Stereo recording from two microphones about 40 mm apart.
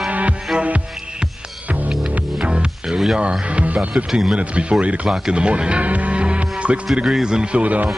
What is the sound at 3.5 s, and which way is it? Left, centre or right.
Music, right.